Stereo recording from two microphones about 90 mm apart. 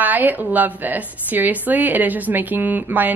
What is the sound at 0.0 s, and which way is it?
A woman's voice, 20° right (ahead or behind).